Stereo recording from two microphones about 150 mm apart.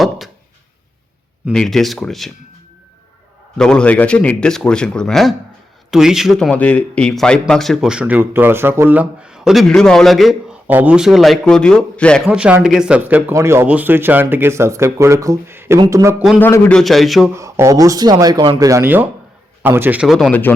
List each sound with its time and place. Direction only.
1.5 s speech: centre (ahead or behind)
3.6 s speech: 5° left (ahead or behind)
12.3 s speech: 5° right (ahead or behind)
16.4 s speech: 10° left (ahead or behind)
17.3 s speech: 20° right (ahead or behind)
18.7 s speech: 15° right (ahead or behind)